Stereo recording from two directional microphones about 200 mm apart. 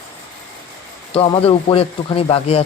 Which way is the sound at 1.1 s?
25° left (ahead or behind).